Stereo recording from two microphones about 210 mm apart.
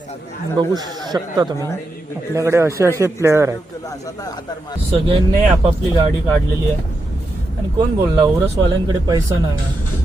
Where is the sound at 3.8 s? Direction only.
15° left (ahead or behind).